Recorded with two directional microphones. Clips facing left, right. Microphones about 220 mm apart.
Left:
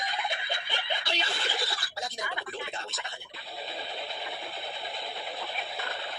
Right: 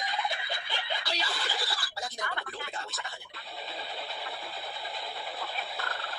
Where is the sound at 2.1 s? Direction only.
15° left (ahead or behind).